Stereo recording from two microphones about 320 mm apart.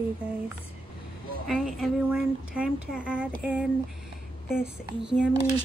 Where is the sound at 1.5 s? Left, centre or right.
Centre.